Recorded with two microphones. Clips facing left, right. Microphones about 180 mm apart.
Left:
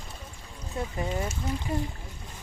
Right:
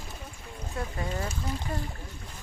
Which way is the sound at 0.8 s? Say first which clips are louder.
Left 2 dB; 20° left (ahead or behind).